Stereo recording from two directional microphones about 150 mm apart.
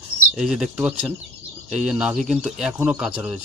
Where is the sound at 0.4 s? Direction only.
5° right (ahead or behind).